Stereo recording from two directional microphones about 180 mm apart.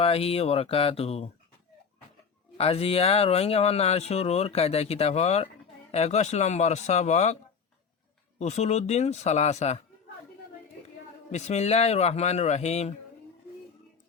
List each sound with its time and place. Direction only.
0.0 s speech: 35° left (ahead or behind)
2.6 s speech: 35° left (ahead or behind)
8.4 s speech: 40° left (ahead or behind)
11.3 s speech: 40° left (ahead or behind)